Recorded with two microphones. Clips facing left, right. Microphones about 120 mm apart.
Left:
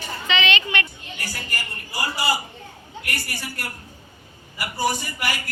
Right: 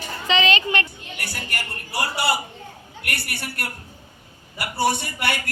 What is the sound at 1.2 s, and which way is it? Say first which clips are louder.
A man's voice: right 1 dB; 70° right (ahead or behind).